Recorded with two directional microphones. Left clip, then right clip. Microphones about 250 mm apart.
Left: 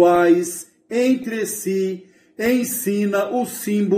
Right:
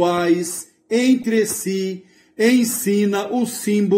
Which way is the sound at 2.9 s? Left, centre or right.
Right.